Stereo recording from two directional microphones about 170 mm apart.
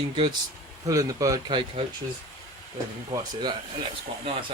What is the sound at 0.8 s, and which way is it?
Speech, 20° right (ahead or behind).